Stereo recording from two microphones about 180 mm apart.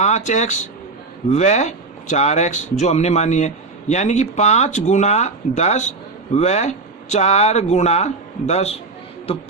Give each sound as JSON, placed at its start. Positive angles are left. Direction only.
{"t": 0.0, "sound": "speech", "side_deg": 40}